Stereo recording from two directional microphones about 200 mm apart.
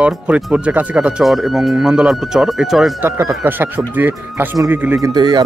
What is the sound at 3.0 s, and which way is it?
Speech, 10° right (ahead or behind).